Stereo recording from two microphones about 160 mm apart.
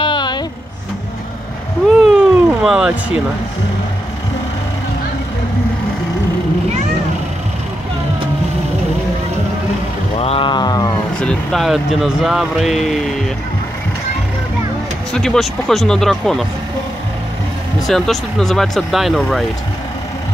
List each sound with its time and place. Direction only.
0.0 s vehicle: 30° left (ahead or behind)
2.0 s a sound: 5° right (ahead or behind)
10.1 s a sound: 40° left (ahead or behind)
11.1 s speech: 5° left (ahead or behind)
15.1 s speech: 5° left (ahead or behind)
17.8 s speech: centre (ahead or behind)